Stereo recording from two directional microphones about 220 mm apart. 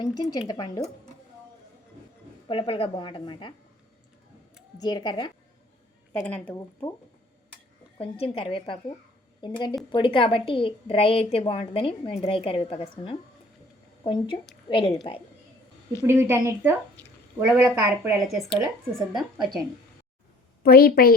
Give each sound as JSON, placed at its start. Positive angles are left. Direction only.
{"t": 0.0, "sound": "speech", "side_deg": 20}
{"t": 2.5, "sound": "a woman's voice", "side_deg": 25}
{"t": 4.8, "sound": "a woman's voice", "side_deg": 20}
{"t": 6.2, "sound": "speech", "side_deg": 5}
{"t": 7.9, "sound": "a woman's voice", "side_deg": 25}
{"t": 16.0, "sound": "speech", "side_deg": -10}
{"t": 20.6, "sound": "a woman's voice", "side_deg": 45}